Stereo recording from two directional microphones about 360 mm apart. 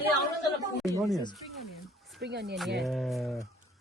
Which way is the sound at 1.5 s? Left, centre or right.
Centre.